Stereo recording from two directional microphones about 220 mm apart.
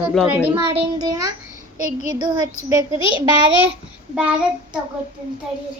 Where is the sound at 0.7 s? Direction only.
20° right (ahead or behind).